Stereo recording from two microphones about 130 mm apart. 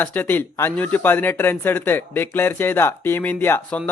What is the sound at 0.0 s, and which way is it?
Speech, 15° left (ahead or behind).